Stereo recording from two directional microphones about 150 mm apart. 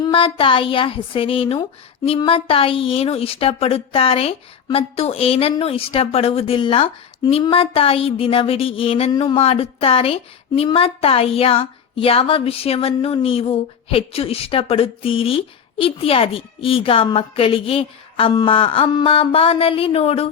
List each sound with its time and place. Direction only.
0.0 s a woman's voice: 35° left (ahead or behind)